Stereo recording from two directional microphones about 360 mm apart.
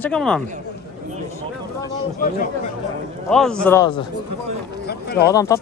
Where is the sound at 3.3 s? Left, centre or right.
Centre.